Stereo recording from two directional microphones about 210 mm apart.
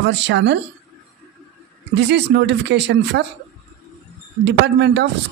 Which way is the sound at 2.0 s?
55° right (ahead or behind).